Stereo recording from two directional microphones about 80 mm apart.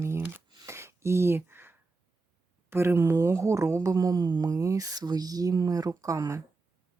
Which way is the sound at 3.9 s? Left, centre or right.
Right.